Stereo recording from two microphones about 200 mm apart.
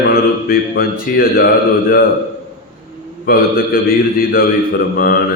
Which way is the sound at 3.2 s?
45° left (ahead or behind).